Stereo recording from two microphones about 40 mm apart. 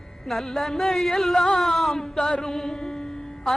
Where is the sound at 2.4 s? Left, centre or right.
Centre.